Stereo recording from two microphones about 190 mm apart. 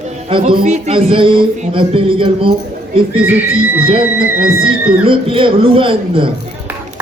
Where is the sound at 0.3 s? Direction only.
30° right (ahead or behind).